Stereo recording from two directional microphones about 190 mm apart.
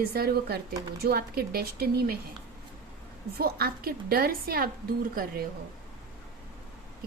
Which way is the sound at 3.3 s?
55° right (ahead or behind).